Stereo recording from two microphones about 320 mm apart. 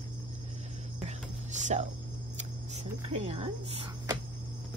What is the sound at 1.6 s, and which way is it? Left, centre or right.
Speech, right.